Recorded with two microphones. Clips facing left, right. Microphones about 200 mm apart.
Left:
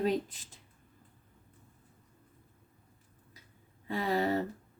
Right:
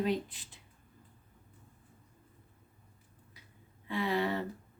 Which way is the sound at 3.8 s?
40° left (ahead or behind).